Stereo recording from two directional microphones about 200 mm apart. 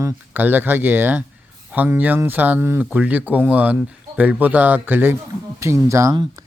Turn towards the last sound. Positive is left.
turn(degrees=-20)  # may be behind; listen again after turning